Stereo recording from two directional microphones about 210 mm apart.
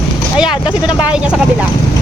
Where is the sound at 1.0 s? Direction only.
5° right (ahead or behind).